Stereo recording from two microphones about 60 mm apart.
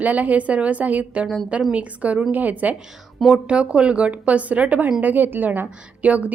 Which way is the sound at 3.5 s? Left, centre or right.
Centre.